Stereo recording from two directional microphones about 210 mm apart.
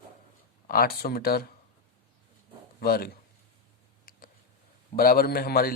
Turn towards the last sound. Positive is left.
turn(degrees=45)  # may be behind; listen again after turning